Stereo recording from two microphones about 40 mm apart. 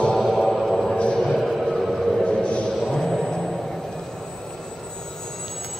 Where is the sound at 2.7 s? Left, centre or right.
Centre.